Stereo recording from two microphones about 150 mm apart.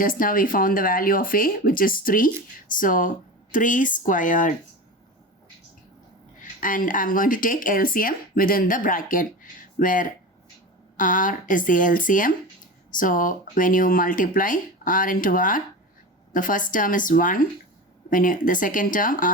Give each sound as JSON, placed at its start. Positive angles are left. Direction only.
{"t": 0.0, "sound": "speech", "side_deg": 70}
{"t": 6.4, "sound": "speech", "side_deg": 65}